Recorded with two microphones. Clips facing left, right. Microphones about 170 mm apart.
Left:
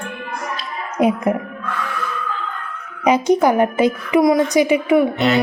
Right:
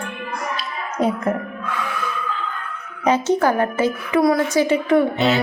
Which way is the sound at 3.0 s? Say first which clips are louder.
Left 3 dB; 15° left (ahead or behind).